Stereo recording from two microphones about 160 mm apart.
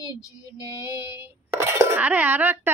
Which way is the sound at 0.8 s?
10° right (ahead or behind).